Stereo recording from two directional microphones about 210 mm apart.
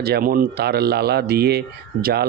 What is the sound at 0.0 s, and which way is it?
Speech, 45° right (ahead or behind).